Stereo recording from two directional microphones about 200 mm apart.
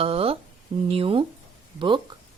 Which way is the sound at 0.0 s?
30° right (ahead or behind).